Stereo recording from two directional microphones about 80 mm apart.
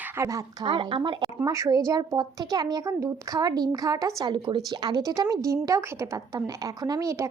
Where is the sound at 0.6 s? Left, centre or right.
Right.